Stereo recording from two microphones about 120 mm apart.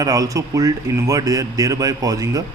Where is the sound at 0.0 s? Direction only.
30° right (ahead or behind).